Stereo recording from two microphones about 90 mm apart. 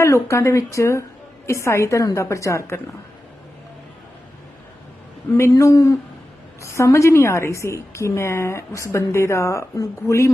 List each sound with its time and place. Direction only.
0.0 s a woman's voice: 30° left (ahead or behind)
5.4 s a woman's voice: 35° left (ahead or behind)